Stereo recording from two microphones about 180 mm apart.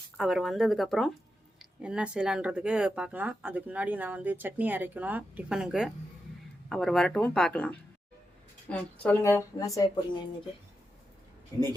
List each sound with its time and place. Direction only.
0.2 s a woman's voice: centre (ahead or behind); by 10.0 s 20° left (ahead or behind)